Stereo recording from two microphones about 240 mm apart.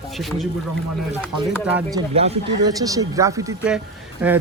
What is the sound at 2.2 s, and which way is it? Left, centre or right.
A man's voice, right.